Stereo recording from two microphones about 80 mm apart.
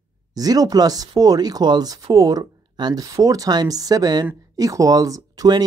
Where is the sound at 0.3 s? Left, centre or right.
Right.